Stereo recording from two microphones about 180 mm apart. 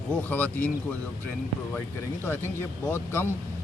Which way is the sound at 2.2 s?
10° left (ahead or behind).